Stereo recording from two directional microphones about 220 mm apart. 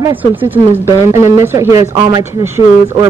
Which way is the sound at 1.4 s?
10° right (ahead or behind).